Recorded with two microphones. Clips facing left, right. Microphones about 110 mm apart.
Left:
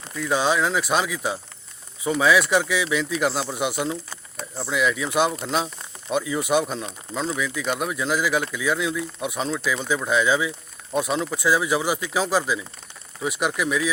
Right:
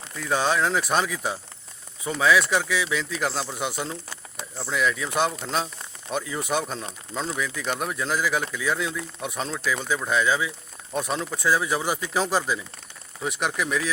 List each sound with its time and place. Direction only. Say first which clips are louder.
0.3 s speech: left 1 dB; 10° left (ahead or behind)